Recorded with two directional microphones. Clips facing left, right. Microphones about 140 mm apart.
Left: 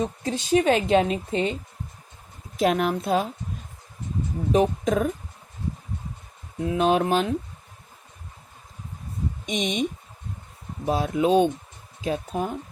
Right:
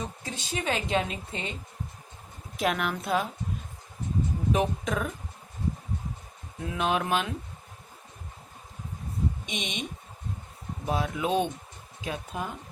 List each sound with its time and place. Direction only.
0.0 s speech: 40° left (ahead or behind)
2.6 s speech: 35° left (ahead or behind)
4.5 s speech: 40° left (ahead or behind)
6.7 s speech: 35° left (ahead or behind)
9.5 s speech: 40° left (ahead or behind)
10.8 s speech: 35° left (ahead or behind)